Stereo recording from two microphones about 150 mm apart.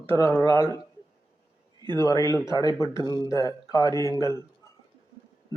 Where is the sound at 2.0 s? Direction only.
20° left (ahead or behind).